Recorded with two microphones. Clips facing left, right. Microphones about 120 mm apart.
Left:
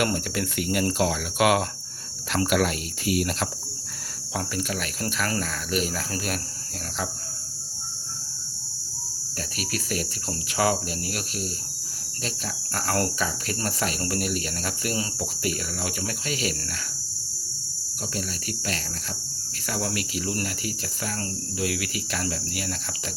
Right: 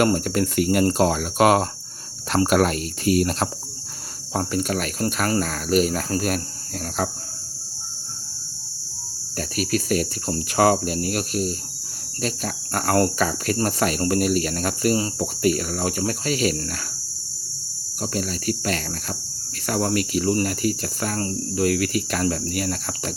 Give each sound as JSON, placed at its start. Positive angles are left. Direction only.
{"t": 0.0, "sound": "speech", "side_deg": -40}
{"t": 9.6, "sound": "speech", "side_deg": -45}
{"t": 18.1, "sound": "speech", "side_deg": -45}